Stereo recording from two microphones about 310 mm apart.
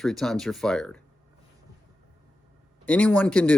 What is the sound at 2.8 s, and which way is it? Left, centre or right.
Speech, centre.